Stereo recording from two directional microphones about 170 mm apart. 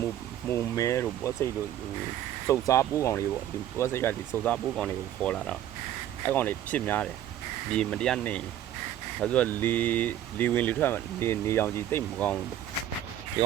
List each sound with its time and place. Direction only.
0.0 s speech: 15° left (ahead or behind)
2.5 s speech: 15° left (ahead or behind)